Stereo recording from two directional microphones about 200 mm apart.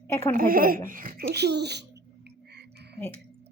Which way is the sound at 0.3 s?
45° right (ahead or behind).